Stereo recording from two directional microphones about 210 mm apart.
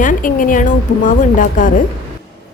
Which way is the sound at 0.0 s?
40° left (ahead or behind).